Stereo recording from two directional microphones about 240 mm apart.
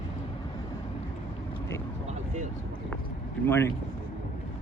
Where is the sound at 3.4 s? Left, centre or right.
Centre.